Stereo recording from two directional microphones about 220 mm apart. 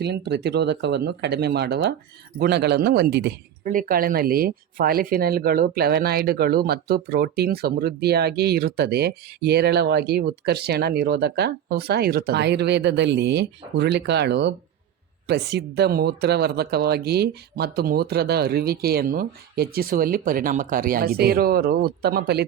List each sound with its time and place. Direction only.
0.0 s speech: 50° right (ahead or behind)
3.6 s speech: 40° right (ahead or behind)